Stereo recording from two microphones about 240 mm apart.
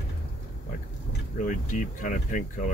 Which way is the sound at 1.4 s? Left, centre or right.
Left.